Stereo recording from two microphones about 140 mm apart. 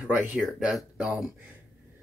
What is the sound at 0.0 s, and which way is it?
Speech, 10° right (ahead or behind).